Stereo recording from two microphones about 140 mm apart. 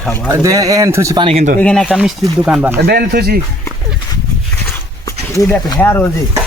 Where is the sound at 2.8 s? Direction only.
90° right.